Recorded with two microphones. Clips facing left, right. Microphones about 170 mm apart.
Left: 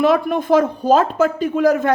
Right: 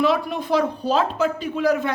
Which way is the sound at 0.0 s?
50° left (ahead or behind).